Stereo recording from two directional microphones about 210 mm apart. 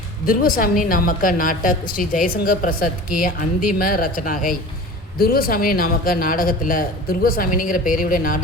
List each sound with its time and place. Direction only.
0.3 s a woman's voice: 45° left (ahead or behind)